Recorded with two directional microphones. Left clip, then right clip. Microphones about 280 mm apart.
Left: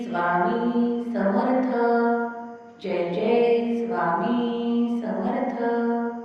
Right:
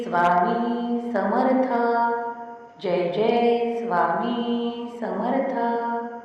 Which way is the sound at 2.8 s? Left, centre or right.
Centre.